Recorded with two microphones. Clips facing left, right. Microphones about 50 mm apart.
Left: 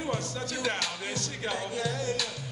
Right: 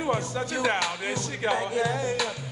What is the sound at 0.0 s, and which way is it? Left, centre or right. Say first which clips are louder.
Music: right 5 dB; right.